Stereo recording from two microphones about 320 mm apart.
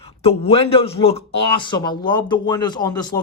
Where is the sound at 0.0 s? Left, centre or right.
Centre.